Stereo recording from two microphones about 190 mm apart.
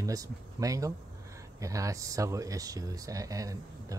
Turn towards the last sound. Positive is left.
turn(degrees=-20)  # may be behind; listen again after turning